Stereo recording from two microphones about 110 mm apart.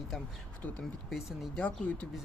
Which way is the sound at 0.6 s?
15° left (ahead or behind).